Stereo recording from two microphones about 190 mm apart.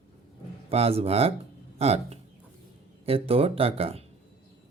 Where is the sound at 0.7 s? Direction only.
30° right (ahead or behind).